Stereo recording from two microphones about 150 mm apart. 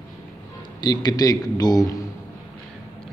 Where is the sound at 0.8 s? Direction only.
25° left (ahead or behind).